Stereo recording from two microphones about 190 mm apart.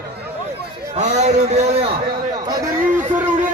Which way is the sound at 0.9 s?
35° right (ahead or behind).